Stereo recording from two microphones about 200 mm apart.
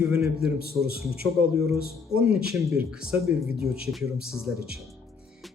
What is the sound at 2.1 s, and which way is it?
Speech, 5° right (ahead or behind).